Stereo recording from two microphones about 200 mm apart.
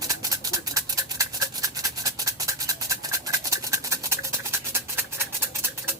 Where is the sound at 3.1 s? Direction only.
15° right (ahead or behind).